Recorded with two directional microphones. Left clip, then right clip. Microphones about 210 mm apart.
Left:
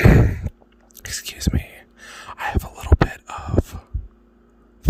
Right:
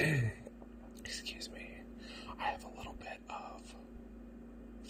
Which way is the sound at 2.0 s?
45° left (ahead or behind).